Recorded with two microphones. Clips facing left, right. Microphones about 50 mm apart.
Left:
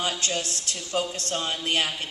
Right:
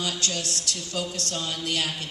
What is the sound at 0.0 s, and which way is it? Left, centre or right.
Speech, left.